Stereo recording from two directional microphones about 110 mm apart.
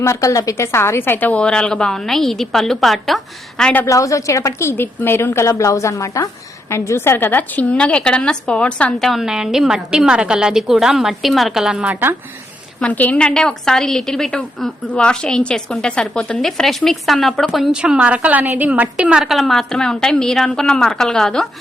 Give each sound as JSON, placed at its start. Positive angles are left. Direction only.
{"t": 0.0, "sound": "a woman's voice", "side_deg": 30}
{"t": 3.8, "sound": "a woman's voice", "side_deg": 30}
{"t": 9.0, "sound": "a woman's voice", "side_deg": -5}
{"t": 12.8, "sound": "a woman's voice", "side_deg": 15}